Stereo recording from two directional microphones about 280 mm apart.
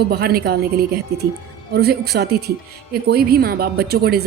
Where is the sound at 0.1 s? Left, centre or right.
Right.